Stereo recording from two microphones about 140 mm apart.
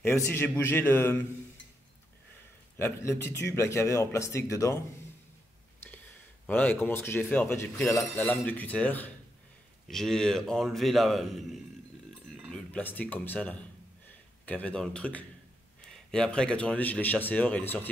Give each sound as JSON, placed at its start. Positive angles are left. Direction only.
{"t": 0.0, "sound": "speech", "side_deg": 20}
{"t": 2.8, "sound": "speech", "side_deg": 20}
{"t": 6.4, "sound": "a man's voice", "side_deg": 10}